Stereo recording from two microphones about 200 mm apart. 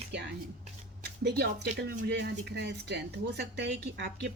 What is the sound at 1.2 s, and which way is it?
Speech, 55° right (ahead or behind).